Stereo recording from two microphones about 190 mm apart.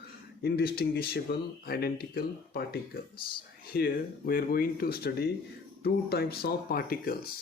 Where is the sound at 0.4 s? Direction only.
55° left (ahead or behind).